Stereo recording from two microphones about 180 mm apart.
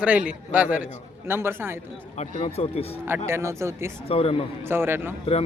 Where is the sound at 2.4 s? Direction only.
35° left (ahead or behind).